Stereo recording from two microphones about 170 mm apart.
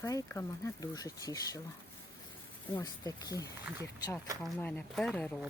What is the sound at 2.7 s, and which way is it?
Speech, 20° left (ahead or behind).